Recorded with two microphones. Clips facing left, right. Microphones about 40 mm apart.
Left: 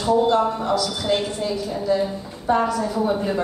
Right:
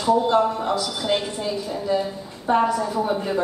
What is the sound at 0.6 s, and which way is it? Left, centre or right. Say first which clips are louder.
Speech: left 2 dB; right.